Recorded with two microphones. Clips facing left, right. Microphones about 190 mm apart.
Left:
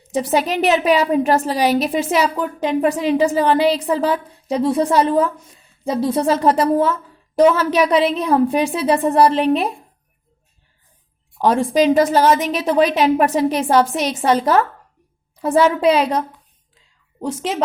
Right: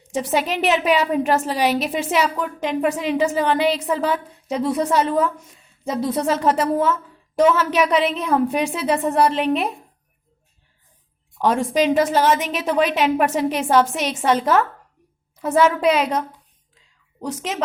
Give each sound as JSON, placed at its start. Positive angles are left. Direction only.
{"t": 0.1, "sound": "a woman's voice", "side_deg": 35}
{"t": 11.3, "sound": "a woman's voice", "side_deg": 35}